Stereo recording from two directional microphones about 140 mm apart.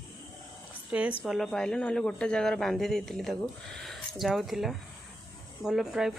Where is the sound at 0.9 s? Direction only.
10° right (ahead or behind).